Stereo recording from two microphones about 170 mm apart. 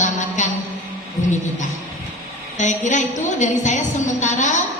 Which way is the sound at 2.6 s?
45° left (ahead or behind).